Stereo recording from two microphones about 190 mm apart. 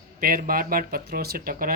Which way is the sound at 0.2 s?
50° right (ahead or behind).